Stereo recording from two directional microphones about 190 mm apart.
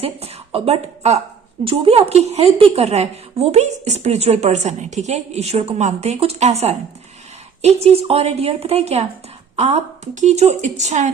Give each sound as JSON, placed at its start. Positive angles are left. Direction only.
{"t": 0.0, "sound": "a woman's voice", "side_deg": -30}